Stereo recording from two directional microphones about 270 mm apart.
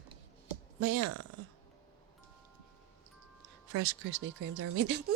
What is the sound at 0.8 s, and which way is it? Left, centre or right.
Speech, right.